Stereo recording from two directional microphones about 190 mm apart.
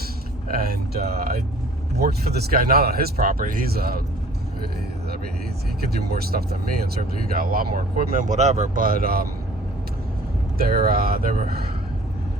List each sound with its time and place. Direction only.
0.4 s speech: 50° right (ahead or behind)
6.1 s speech: 55° right (ahead or behind)
10.6 s speech: 50° right (ahead or behind)